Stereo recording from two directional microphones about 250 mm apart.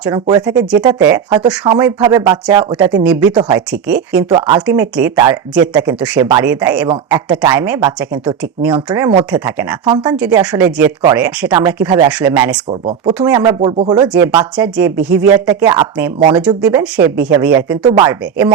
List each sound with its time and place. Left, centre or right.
0.0 s speech: centre
2.9 s speech: centre
4.3 s speech: centre
9.8 s speech: centre
10.2 s speech: centre
11.5 s speech: centre
14.5 s speech: centre